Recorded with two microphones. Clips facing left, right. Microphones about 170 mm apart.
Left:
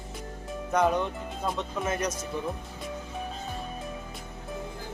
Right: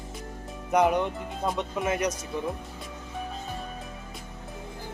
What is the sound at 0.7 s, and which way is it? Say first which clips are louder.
Speech: right 2 dB; 15° right (ahead or behind).